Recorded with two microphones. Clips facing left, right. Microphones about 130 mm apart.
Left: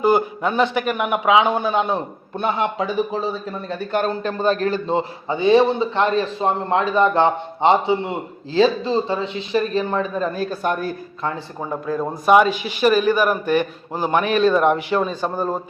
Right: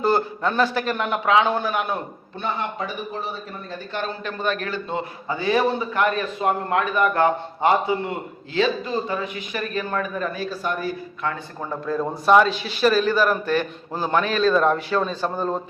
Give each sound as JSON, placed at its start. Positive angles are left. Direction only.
{"t": 0.0, "sound": "a man's voice", "side_deg": 10}
{"t": 2.4, "sound": "speech", "side_deg": 90}
{"t": 3.9, "sound": "a man's voice", "side_deg": 40}
{"t": 10.3, "sound": "a man's voice", "side_deg": 50}
{"t": 11.6, "sound": "a man's voice", "side_deg": 10}